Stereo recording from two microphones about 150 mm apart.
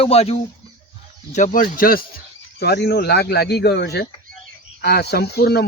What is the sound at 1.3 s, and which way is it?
Speech, 60° left (ahead or behind).